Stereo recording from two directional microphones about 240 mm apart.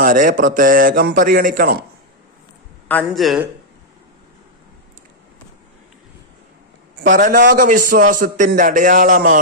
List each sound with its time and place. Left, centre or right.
0.0 s a man's voice: right
2.9 s a man's voice: centre
7.1 s a man's voice: right